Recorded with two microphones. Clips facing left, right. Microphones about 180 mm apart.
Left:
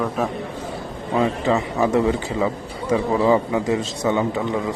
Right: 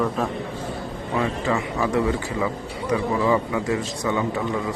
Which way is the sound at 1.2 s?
20° left (ahead or behind).